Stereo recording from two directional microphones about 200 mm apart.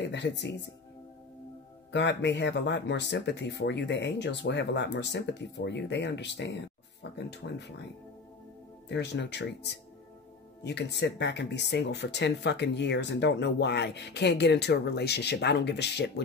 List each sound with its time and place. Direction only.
0.0 s speech: 60° left (ahead or behind)
1.9 s speech: 60° left (ahead or behind)
8.8 s speech: 60° left (ahead or behind)